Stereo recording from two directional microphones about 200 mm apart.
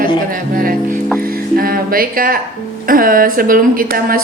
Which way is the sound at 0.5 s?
45° right (ahead or behind).